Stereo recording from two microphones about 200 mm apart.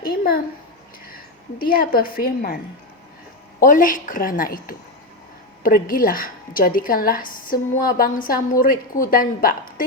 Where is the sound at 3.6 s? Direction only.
40° left (ahead or behind).